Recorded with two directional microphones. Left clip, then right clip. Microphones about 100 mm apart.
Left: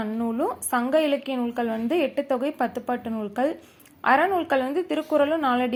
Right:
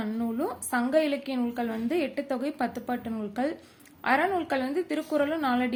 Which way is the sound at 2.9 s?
20° left (ahead or behind).